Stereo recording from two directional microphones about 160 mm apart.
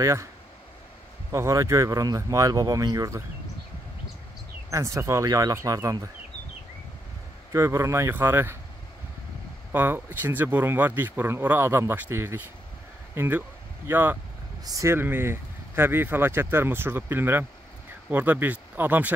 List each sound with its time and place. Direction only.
0.0 s speech: 20° right (ahead or behind)
1.3 s speech: 20° right (ahead or behind)
4.6 s speech: 20° right (ahead or behind)
7.5 s speech: 20° right (ahead or behind)
9.7 s speech: 10° right (ahead or behind)